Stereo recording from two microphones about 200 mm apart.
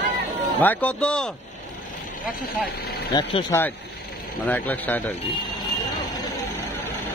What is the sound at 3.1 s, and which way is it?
A man's voice, 15° left (ahead or behind).